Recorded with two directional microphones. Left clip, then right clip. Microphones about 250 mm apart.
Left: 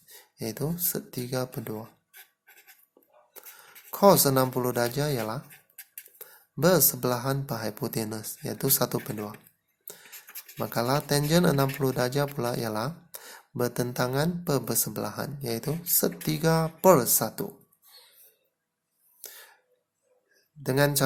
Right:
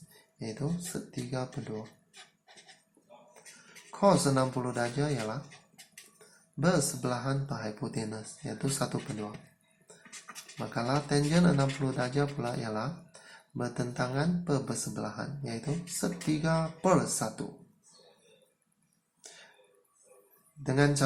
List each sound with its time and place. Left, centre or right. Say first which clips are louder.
0.9 s speech: left 5 dB; left
3.9 s speech: left 6 dB; left
6.6 s speech: left 7 dB; left
10.6 s speech: left 5 dB; left
19.2 s throat clearing: left 4 dB; left
20.7 s speech: left 3 dB; left